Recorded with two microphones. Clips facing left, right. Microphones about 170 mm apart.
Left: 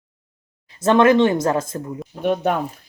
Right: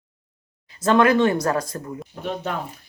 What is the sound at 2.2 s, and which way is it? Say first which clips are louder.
Speech: left 9 dB; 60° left (ahead or behind).